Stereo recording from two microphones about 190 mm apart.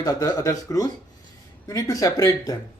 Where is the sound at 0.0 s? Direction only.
20° left (ahead or behind).